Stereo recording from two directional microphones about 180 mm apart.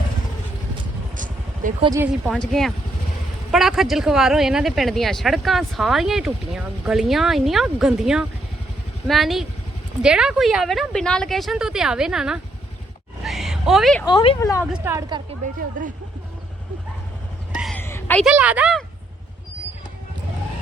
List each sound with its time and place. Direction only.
1.1 s vehicle: 45° right (ahead or behind)
2.0 s speech: 5° right (ahead or behind)
13.2 s a sound: centre (ahead or behind)
14.0 s speech: 25° left (ahead or behind)
14.3 s speech: 15° left (ahead or behind)
14.7 s speech: 15° right (ahead or behind)
17.7 s a sound: 10° left (ahead or behind)
18.2 s a woman's voice: 5° right (ahead or behind)